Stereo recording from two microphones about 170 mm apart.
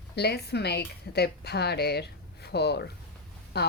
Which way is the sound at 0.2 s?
70° left (ahead or behind).